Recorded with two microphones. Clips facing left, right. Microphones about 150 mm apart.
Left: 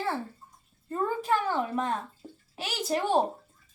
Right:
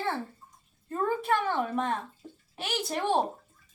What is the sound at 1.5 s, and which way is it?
A woman's voice, centre (ahead or behind).